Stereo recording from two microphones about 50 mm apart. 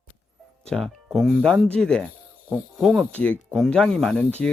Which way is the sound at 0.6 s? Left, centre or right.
Centre.